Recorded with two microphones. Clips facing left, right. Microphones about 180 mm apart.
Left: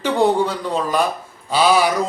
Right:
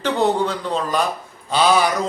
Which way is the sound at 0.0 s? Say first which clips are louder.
Left 2 dB; 10° left (ahead or behind).